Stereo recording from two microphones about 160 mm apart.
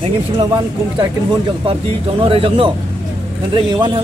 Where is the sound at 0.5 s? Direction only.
30° right (ahead or behind).